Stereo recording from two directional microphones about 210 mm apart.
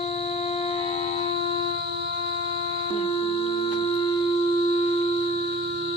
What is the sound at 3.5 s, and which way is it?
Music, 30° left (ahead or behind).